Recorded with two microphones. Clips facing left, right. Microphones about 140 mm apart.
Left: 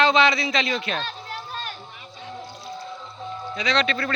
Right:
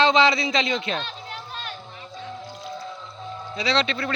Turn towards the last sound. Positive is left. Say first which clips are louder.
# even
turn(degrees=-20)  # may be behind; listen again after turning